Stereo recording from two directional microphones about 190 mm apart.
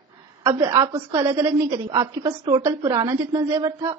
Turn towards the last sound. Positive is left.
turn(degrees=-15)  # may be behind; listen again after turning